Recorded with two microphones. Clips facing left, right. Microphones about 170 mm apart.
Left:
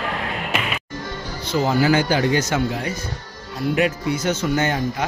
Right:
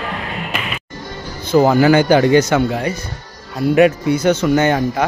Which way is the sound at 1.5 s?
55° right (ahead or behind).